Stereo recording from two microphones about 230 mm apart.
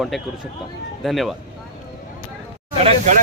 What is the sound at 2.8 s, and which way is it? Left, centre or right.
Speech, right.